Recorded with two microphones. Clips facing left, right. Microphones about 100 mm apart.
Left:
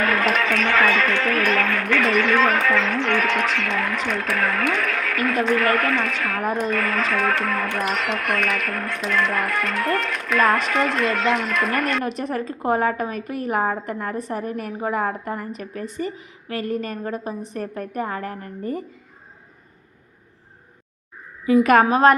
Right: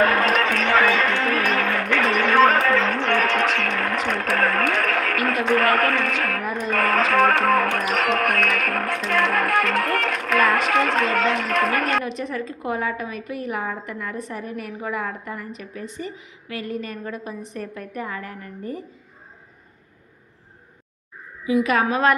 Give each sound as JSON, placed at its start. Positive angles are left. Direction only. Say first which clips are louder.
{"t": 0.0, "sound": "speech", "louder": "right 2 dB", "side_deg": -40}
{"t": 2.1, "sound": "speech", "louder": "right 5 dB", "side_deg": -40}
{"t": 6.4, "sound": "a woman's voice", "louder": "left 4 dB", "side_deg": 45}
{"t": 6.7, "sound": "speech", "louder": "right 2 dB", "side_deg": -60}
{"t": 8.2, "sound": "music", "louder": "right 2 dB", "side_deg": -65}
{"t": 10.7, "sound": "speech", "louder": "right 1 dB", "side_deg": -70}
{"t": 12.0, "sound": "a woman's voice", "louder": "left 2 dB", "side_deg": 45}
{"t": 21.4, "sound": "a woman's voice", "louder": "left 5 dB", "side_deg": 50}
{"t": 21.8, "sound": "a woman's voice", "louder": "left 4 dB", "side_deg": 35}